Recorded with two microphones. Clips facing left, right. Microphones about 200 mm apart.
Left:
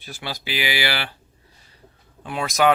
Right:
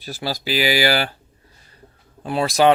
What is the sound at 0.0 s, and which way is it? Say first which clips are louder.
Speech: right 6 dB; 35° right (ahead or behind).